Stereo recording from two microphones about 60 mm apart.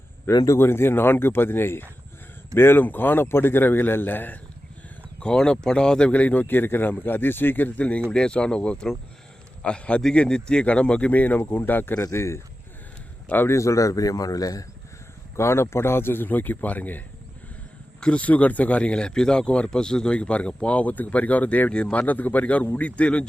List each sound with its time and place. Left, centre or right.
0.3 s speech: left
0.6 s speech: left
5.2 s speech: centre
6.1 s a man's voice: left
12.1 s speech: left
13.2 s a man's voice: left
13.5 s a man's voice: left
15.4 s speech: left
18.0 s a man's voice: left